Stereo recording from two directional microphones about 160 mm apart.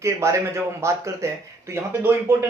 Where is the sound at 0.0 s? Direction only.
20° right (ahead or behind).